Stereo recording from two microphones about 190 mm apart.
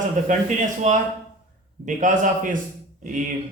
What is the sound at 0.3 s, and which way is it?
Speech, 40° right (ahead or behind).